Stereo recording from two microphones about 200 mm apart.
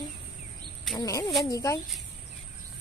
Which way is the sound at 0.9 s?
15° left (ahead or behind).